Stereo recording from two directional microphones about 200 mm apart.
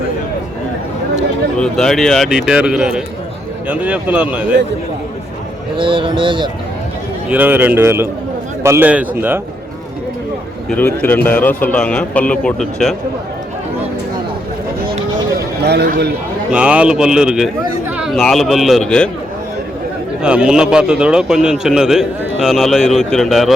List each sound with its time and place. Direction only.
1.5 s a man's voice: 5° left (ahead or behind)
5.7 s speech: 25° right (ahead or behind)
7.3 s speech: 10° right (ahead or behind)
10.7 s a man's voice: 10° left (ahead or behind)
15.6 s a man's voice: 55° right (ahead or behind)
16.5 s a man's voice: 5° right (ahead or behind)
20.2 s a man's voice: 5° right (ahead or behind)